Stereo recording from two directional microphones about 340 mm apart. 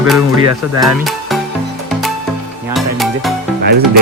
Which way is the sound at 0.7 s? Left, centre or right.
Centre.